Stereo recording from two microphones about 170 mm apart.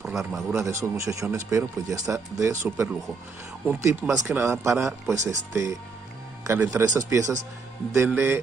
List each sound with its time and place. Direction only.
0.0 s speech: centre (ahead or behind)
0.6 s speech: 20° right (ahead or behind)
4.4 s speech: 15° right (ahead or behind)
6.4 s speech: 15° right (ahead or behind)